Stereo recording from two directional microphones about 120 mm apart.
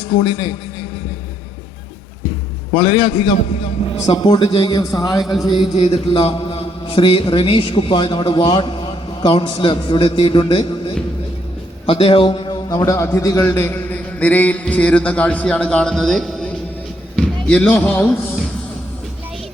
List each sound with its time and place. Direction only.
0.1 s a man's voice: 35° left (ahead or behind)
2.7 s a man's voice: 40° left (ahead or behind)
5.2 s a sound: centre (ahead or behind)
5.5 s mantra: 45° left (ahead or behind)
11.9 s a man's voice: 50° left (ahead or behind); by 18.1 s 10° left (ahead or behind)